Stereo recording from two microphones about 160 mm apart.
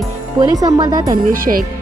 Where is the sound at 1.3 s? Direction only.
60° right (ahead or behind).